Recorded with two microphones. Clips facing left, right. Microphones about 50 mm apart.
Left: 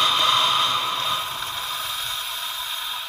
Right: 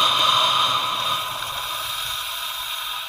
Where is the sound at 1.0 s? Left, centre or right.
Left.